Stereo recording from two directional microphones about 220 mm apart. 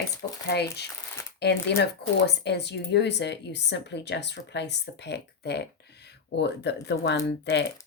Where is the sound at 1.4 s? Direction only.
50° left (ahead or behind).